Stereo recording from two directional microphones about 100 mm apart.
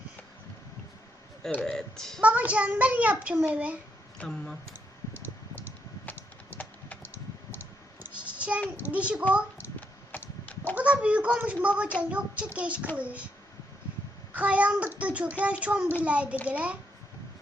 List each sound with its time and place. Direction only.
1.6 s speech: 5° left (ahead or behind)
2.2 s speech: 15° right (ahead or behind)
4.2 s speech: 10° left (ahead or behind)
5.2 s computer keyboard: 25° left (ahead or behind)
8.0 s a sound: 15° right (ahead or behind)
8.7 s speech: 15° right (ahead or behind)
9.3 s a sound: 10° right (ahead or behind)
10.1 s a sound: 20° left (ahead or behind)
10.8 s speech: 15° right (ahead or behind)
14.3 s speech: 15° right (ahead or behind)